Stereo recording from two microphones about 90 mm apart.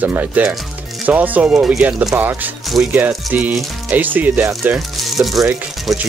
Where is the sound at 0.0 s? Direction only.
20° right (ahead or behind).